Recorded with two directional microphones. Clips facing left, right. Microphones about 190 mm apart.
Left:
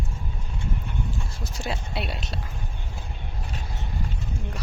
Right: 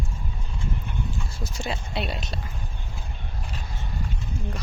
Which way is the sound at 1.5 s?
5° left (ahead or behind).